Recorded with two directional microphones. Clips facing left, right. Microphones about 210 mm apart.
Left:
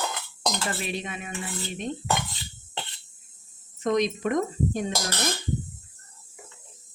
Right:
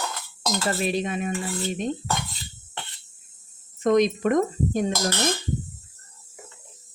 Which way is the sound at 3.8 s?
50° right (ahead or behind).